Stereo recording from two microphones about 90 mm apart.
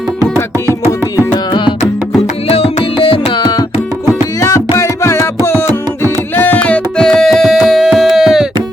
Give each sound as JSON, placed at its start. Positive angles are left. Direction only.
{"t": 3.0, "sound": "music", "side_deg": 85}
{"t": 4.4, "sound": "music", "side_deg": 35}